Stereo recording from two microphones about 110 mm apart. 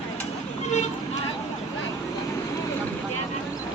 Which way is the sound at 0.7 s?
90° left.